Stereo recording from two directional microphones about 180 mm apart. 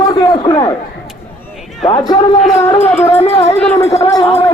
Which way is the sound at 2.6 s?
10° left (ahead or behind).